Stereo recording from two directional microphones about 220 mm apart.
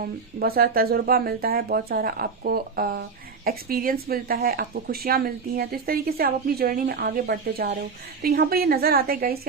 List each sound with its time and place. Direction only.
0.0 s speech: 45° right (ahead or behind)